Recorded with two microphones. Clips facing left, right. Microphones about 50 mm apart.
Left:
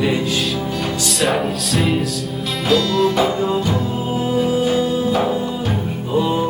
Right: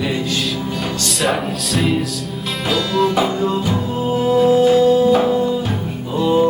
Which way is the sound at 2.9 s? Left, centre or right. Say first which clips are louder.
Even; centre.